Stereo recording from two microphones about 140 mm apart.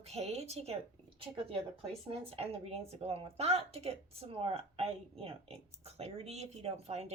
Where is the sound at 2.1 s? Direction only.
45° right (ahead or behind).